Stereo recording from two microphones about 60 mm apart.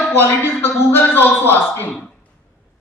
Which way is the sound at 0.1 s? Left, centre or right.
Left.